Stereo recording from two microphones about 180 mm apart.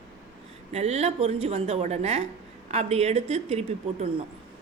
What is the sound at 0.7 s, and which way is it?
A woman's voice, 35° right (ahead or behind).